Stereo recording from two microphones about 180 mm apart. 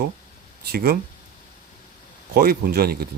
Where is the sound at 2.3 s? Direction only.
60° right (ahead or behind).